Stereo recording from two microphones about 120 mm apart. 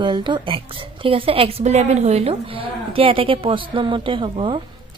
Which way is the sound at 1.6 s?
70° right (ahead or behind).